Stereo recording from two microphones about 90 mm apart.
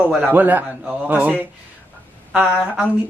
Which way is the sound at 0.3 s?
20° right (ahead or behind).